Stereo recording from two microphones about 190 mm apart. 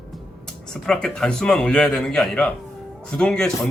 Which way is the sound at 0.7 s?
5° left (ahead or behind).